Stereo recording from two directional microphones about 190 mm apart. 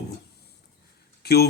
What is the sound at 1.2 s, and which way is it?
Speech, 55° left (ahead or behind).